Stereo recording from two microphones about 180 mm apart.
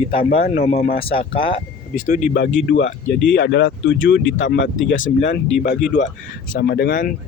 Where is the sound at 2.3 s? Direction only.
80° left.